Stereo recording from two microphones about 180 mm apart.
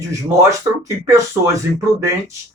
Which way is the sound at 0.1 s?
20° right (ahead or behind).